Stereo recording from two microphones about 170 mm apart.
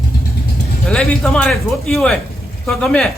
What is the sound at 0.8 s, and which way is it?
A man's voice, 5° left (ahead or behind).